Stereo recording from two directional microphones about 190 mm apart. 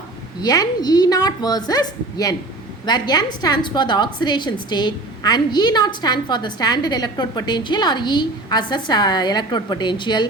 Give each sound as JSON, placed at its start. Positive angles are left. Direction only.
{"t": 0.4, "sound": "a woman's voice", "side_deg": 20}